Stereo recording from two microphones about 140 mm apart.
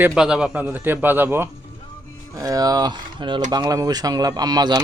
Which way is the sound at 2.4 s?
25° right (ahead or behind).